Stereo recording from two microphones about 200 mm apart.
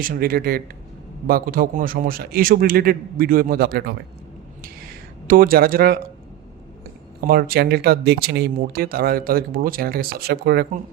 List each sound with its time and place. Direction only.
0.0 s speech: 45° right (ahead or behind)
5.3 s speech: 45° right (ahead or behind)
7.2 s speech: 50° right (ahead or behind)